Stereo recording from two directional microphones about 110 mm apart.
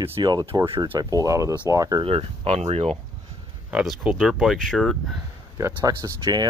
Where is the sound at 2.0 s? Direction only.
65° right (ahead or behind).